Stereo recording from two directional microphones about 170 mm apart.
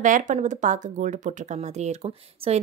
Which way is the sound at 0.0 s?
50° right (ahead or behind).